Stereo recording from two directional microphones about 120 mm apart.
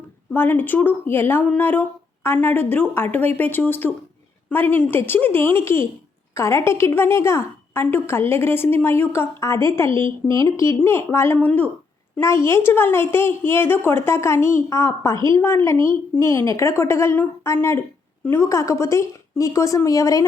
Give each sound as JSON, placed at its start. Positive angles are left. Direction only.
{"t": 0.3, "sound": "a woman's voice", "side_deg": 15}